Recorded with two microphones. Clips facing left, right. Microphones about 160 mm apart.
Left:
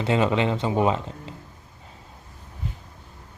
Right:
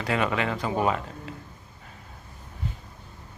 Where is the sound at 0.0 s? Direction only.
25° left (ahead or behind).